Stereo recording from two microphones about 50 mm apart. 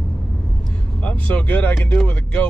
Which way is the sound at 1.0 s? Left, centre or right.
Left.